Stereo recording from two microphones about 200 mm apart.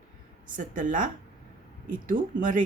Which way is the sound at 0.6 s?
40° right (ahead or behind).